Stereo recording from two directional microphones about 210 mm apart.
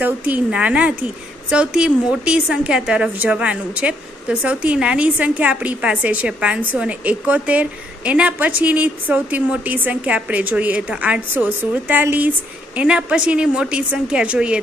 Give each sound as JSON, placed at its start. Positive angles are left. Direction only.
{"t": 0.0, "sound": "a woman's voice", "side_deg": -10}